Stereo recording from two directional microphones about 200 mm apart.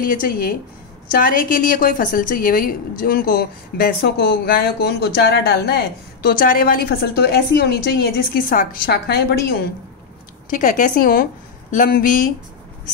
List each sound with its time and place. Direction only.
0.0 s a woman's voice: 45° left (ahead or behind)
10.5 s a woman's voice: 40° left (ahead or behind)